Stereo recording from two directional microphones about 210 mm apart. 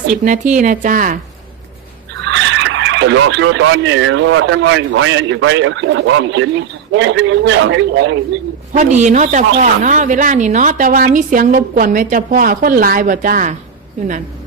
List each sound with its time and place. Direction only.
0.3 s speech: 40° right (ahead or behind)
2.3 s speech: 60° right (ahead or behind)
8.7 s speech: 35° right (ahead or behind)